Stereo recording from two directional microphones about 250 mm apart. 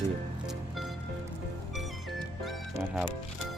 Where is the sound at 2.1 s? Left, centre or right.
Centre.